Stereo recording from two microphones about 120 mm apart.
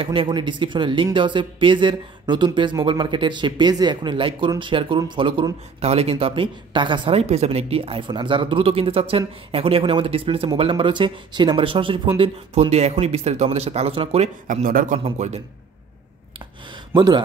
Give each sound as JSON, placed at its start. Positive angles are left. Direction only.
{"t": 0.0, "sound": "speech", "side_deg": -45}
{"t": 12.2, "sound": "speech", "side_deg": -60}
{"t": 16.3, "sound": "a sound", "side_deg": -40}